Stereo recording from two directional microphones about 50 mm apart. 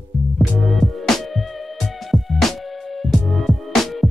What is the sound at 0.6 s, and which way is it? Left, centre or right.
Music, centre.